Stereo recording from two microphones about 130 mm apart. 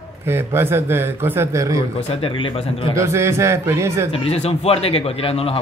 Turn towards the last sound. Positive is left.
turn(degrees=45)  # may be behind; listen again after turning